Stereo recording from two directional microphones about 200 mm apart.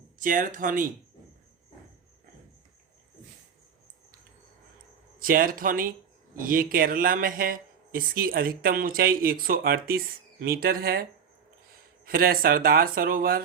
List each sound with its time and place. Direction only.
0.2 s speech: 40° right (ahead or behind)
5.2 s speech: 45° right (ahead or behind)
12.0 s speech: 45° right (ahead or behind)